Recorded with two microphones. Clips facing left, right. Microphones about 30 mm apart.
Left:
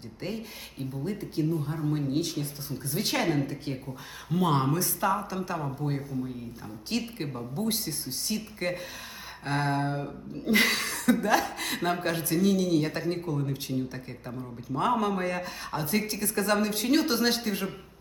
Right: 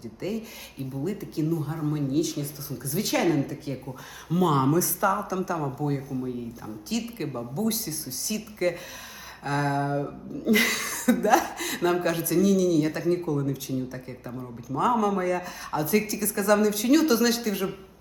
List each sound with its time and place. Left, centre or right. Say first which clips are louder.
0.2 s speech: right 3 dB; left
2.9 s speech: right 3 dB; left
4.3 s speech: right 3 dB; left
4.7 s speech: right 3 dB; left
6.1 s speech: right 1 dB; centre
6.9 s speech: right 2 dB; left